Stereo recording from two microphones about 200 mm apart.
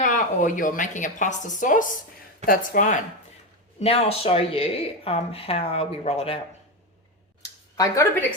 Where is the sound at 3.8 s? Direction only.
30° left (ahead or behind).